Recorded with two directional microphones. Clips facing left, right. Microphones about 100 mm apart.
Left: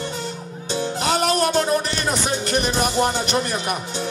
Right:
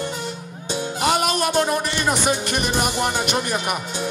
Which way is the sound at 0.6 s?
15° right (ahead or behind).